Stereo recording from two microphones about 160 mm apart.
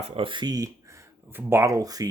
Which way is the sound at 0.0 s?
35° right (ahead or behind).